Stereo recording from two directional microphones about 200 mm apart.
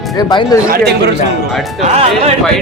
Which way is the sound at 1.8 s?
30° right (ahead or behind).